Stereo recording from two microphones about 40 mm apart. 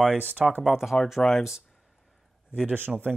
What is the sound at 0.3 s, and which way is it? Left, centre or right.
Speech, right.